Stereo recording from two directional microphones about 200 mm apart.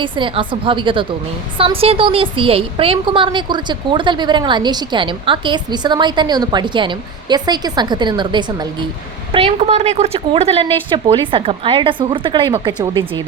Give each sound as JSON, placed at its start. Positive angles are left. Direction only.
{"t": 0.0, "sound": "a woman's voice", "side_deg": -25}